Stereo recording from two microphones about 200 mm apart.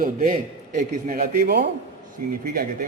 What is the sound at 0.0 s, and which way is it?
A man's voice, 40° right (ahead or behind).